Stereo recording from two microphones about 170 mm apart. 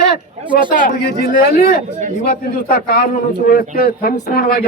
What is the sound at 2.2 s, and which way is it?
A man's voice, 60° left (ahead or behind).